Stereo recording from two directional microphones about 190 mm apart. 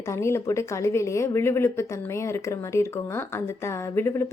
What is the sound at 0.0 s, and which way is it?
A woman's voice, 15° left (ahead or behind).